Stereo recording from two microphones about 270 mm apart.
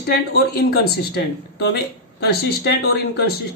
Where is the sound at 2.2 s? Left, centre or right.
Left.